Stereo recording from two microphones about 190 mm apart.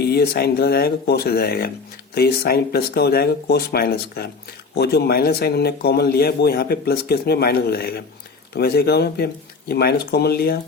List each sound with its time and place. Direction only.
0.0 s a man's voice: 55° left (ahead or behind)